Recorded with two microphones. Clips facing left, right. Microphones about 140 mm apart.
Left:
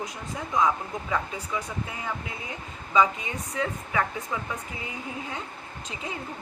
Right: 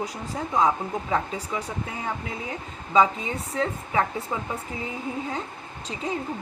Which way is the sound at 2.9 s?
30° right (ahead or behind).